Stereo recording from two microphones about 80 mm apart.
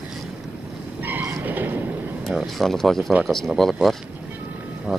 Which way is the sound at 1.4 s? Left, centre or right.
Right.